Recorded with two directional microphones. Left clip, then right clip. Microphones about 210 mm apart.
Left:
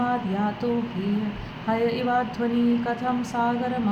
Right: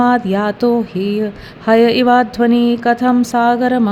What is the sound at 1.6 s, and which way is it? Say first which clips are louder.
Speech: right 14 dB; 55° right (ahead or behind).